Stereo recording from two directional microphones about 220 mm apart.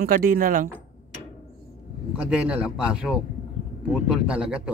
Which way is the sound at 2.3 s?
5° right (ahead or behind).